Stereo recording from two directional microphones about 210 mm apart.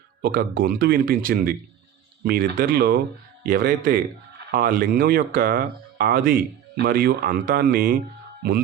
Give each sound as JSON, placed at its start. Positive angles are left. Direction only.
{"t": 0.2, "sound": "speech", "side_deg": -45}